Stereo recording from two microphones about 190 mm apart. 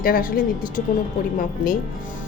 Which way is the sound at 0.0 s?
50° left (ahead or behind).